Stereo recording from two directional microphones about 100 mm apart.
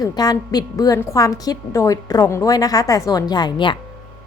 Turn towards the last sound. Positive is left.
turn(degrees=50)  # may be behind; listen again after turning